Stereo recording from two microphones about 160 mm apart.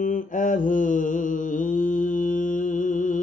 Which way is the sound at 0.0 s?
55° left (ahead or behind).